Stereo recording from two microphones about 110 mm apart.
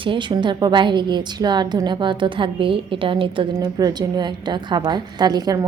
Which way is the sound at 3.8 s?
40° right (ahead or behind).